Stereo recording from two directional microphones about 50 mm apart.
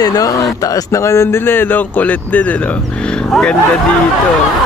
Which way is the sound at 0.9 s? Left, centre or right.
Left.